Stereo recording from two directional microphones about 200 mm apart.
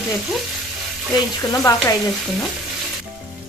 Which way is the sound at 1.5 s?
15° left (ahead or behind).